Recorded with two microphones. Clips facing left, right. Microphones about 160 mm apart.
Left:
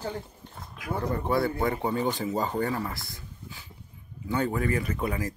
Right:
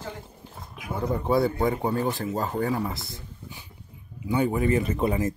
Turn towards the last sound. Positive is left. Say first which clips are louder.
# right 5 dB
turn(degrees=-25)  # may be behind; listen again after turning